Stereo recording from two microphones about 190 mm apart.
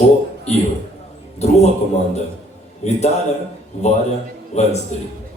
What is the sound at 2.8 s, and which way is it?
A man's voice, 35° left (ahead or behind).